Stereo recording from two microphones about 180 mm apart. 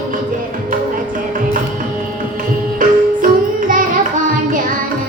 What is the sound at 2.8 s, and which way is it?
Music, 50° right (ahead or behind).